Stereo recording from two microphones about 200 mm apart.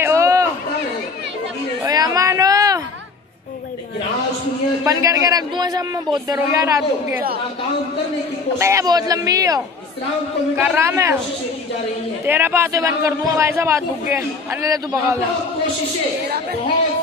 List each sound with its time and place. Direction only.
0.0 s a sound: 15° right (ahead or behind)
1.9 s a sound: 20° right (ahead or behind)
4.8 s a man's voice: 15° right (ahead or behind)
8.5 s a man's voice: 15° right (ahead or behind)
10.6 s a man's voice: 10° right (ahead or behind)
12.3 s a man's voice: 10° right (ahead or behind)